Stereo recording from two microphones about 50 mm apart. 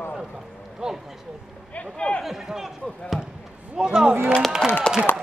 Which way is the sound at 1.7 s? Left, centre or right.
Left.